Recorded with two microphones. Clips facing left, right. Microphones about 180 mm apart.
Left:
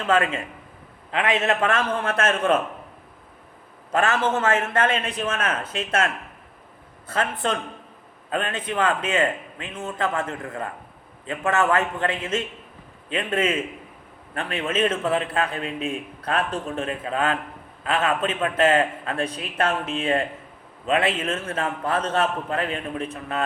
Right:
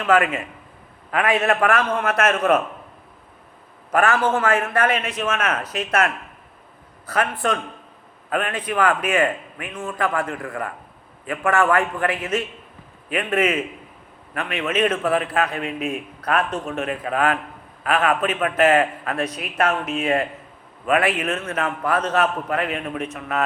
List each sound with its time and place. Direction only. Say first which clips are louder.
0.0 s a man's voice: right 3 dB; 30° left (ahead or behind)
3.9 s a man's voice: right 3 dB; 20° left (ahead or behind)
7.1 s a man's voice: right 3 dB; 25° left (ahead or behind)